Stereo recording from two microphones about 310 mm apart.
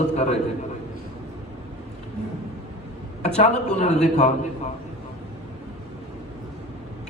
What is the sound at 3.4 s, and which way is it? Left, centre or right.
Speech, left.